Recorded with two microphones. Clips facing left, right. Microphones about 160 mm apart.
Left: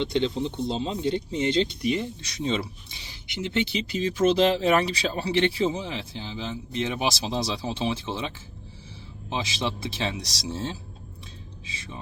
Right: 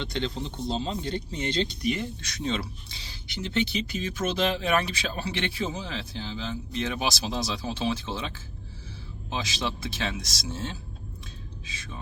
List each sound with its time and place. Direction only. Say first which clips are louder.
0.0 s speech: left 6 dB; 20° left (ahead or behind)
9.3 s speech: left 2 dB; 25° left (ahead or behind)